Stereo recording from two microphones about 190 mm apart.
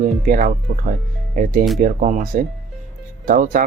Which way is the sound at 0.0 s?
45° right (ahead or behind).